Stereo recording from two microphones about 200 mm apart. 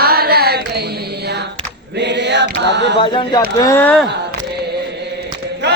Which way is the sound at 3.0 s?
25° left (ahead or behind).